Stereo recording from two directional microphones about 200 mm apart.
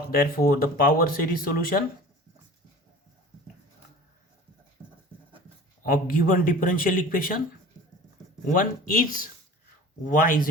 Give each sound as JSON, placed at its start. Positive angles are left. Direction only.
{"t": 0.1, "sound": "speech", "side_deg": 45}
{"t": 5.8, "sound": "speech", "side_deg": 45}
{"t": 8.5, "sound": "speech", "side_deg": 45}